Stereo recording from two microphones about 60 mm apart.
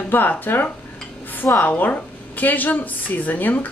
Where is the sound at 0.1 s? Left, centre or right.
Left.